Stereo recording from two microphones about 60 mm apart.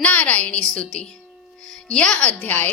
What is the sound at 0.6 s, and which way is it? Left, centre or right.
A woman's voice, centre.